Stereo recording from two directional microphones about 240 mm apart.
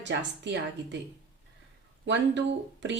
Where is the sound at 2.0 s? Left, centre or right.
Right.